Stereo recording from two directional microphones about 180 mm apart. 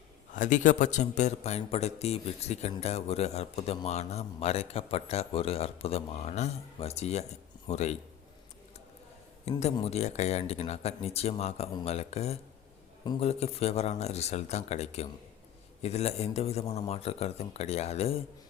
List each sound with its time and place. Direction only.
0.3 s a man's voice: 45° left (ahead or behind)
9.5 s a man's voice: 35° left (ahead or behind)